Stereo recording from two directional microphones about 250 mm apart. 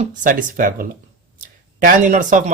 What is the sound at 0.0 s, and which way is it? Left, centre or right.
Speech, right.